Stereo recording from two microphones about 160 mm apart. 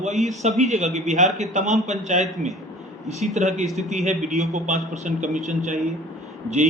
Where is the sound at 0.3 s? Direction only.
45° right (ahead or behind).